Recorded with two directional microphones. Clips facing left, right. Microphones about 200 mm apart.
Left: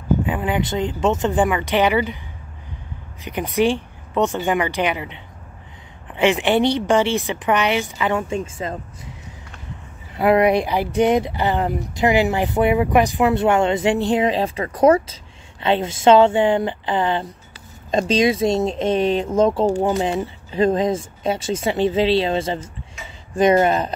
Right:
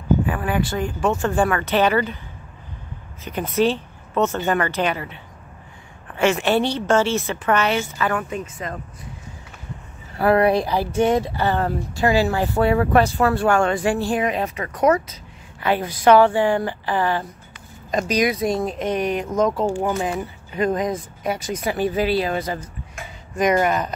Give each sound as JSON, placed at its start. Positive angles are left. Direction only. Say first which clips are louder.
{"t": 0.3, "sound": "speech", "louder": "left 1 dB", "side_deg": 20}
{"t": 3.3, "sound": "a woman's voice", "louder": "left 1 dB", "side_deg": 15}
{"t": 10.1, "sound": "speech", "louder": "left 1 dB", "side_deg": 20}
{"t": 23.0, "sound": "a sound", "louder": "right 4 dB", "side_deg": -50}
{"t": 23.3, "sound": "speech", "louder": "left 3 dB", "side_deg": 30}